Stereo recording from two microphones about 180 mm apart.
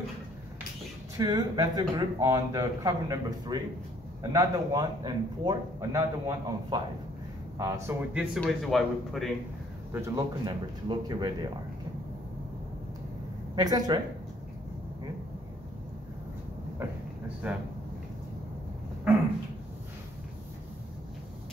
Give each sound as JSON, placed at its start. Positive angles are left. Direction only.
{"t": 1.1, "sound": "a man's voice", "side_deg": -20}
{"t": 8.4, "sound": "speech", "side_deg": 0}
{"t": 9.9, "sound": "a man's voice", "side_deg": -20}
{"t": 13.6, "sound": "a man's voice", "side_deg": -20}
{"t": 17.4, "sound": "a man's voice", "side_deg": -5}